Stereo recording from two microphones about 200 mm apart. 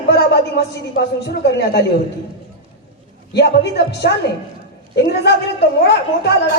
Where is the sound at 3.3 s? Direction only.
55° left (ahead or behind).